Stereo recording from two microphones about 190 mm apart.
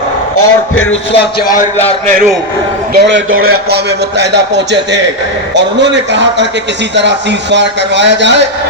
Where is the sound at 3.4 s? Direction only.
55° right (ahead or behind).